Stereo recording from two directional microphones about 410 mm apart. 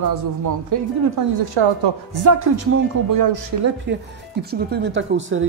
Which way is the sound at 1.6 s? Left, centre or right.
Right.